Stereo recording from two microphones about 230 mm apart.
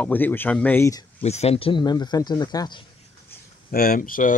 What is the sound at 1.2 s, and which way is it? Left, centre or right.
Speech, left.